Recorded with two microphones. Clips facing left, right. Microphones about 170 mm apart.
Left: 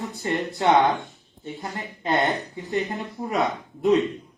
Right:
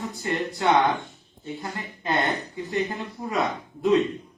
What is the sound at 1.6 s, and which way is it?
Speech, 20° left (ahead or behind).